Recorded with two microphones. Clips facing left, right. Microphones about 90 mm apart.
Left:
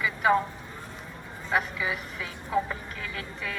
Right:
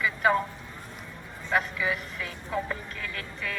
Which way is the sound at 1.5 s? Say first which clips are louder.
Right 1 dB; 10° left (ahead or behind).